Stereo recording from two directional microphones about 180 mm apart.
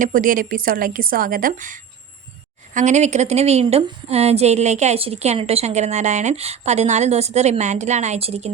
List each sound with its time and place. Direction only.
0.0 s a woman's voice: 50° right (ahead or behind)